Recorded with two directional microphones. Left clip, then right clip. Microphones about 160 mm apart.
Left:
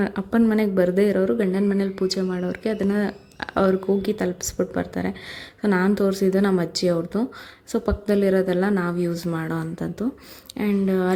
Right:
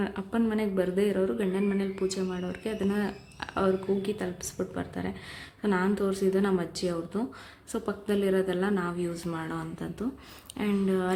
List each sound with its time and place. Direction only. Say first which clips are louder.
0.0 s speech: left 8 dB; 35° left (ahead or behind)